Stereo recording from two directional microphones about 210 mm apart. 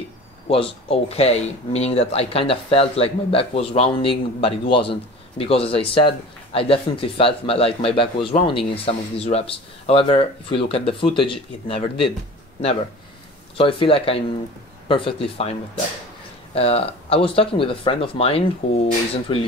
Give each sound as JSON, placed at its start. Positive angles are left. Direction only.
{"t": 0.5, "sound": "speech", "side_deg": 25}
{"t": 13.6, "sound": "speech", "side_deg": 25}
{"t": 16.5, "sound": "speech", "side_deg": 30}